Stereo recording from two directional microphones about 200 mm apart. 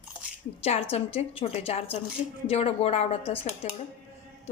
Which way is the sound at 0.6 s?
30° left (ahead or behind).